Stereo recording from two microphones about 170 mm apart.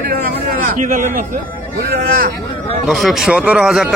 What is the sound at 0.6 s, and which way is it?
Speech, 50° right (ahead or behind).